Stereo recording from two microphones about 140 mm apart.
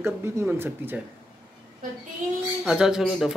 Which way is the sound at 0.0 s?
20° right (ahead or behind).